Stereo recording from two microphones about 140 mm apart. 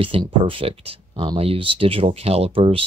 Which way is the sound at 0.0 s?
40° right (ahead or behind).